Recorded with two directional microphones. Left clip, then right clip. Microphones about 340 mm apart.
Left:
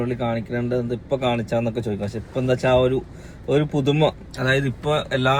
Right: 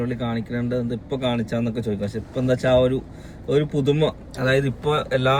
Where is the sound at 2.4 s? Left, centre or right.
Left.